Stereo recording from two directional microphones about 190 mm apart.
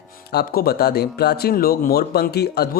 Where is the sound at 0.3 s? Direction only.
55° left (ahead or behind).